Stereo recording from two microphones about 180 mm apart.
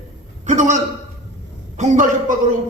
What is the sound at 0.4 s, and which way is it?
Speech, 40° right (ahead or behind).